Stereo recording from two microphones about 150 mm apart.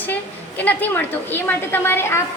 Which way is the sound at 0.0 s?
10° left (ahead or behind).